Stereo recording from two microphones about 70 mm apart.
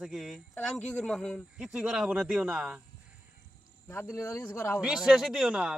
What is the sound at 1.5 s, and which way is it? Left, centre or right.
Speech, centre.